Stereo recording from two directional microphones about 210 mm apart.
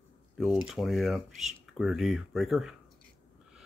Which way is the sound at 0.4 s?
Centre (ahead or behind).